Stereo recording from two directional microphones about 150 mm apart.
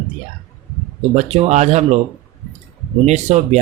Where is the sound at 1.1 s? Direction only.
50° right (ahead or behind).